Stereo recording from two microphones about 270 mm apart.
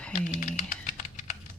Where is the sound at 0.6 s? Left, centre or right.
Left.